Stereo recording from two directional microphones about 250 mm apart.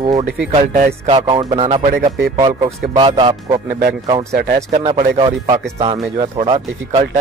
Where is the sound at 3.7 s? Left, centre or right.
Right.